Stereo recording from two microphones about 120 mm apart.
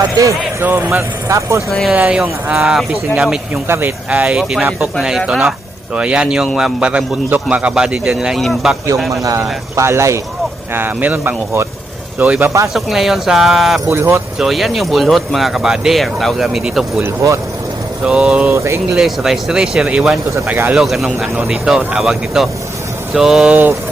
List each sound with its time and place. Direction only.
0.6 s speech: 15° right (ahead or behind)
1.7 s speech: centre (ahead or behind)
2.0 s speech: 10° right (ahead or behind)
3.7 s speech: 15° right (ahead or behind); by 6.7 s centre (ahead or behind)
6.7 s speech: 10° right (ahead or behind)
9.2 s speech: 25° right (ahead or behind)
12.6 s speech: centre (ahead or behind)
13.9 s speech: 20° right (ahead or behind)
14.3 s speech: centre (ahead or behind)
17.0 s speech: 20° right (ahead or behind)
18.0 s speech: 5° right (ahead or behind)
18.5 s speech: 25° right (ahead or behind)
18.9 s speech: centre (ahead or behind)
20.7 s speech: centre (ahead or behind)